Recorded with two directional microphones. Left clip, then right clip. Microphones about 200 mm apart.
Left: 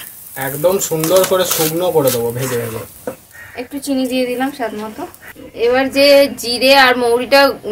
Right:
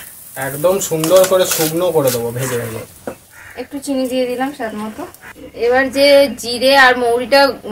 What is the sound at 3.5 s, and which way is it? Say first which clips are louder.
Speech: even; 35° left (ahead or behind).